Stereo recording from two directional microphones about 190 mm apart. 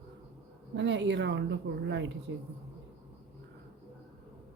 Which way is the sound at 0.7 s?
70° right (ahead or behind).